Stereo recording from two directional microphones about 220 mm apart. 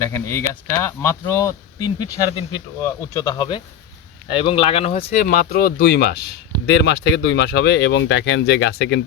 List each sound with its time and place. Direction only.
0.0 s speech: 10° left (ahead or behind); by 9.0 s 50° left (ahead or behind)